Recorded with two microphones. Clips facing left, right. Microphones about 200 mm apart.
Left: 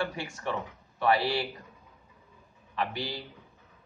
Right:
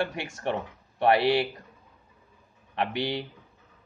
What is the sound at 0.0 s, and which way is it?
Speech, 65° right (ahead or behind).